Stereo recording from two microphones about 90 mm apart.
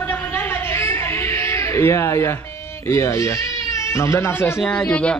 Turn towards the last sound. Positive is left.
turn(degrees=10)  # may be behind; listen again after turning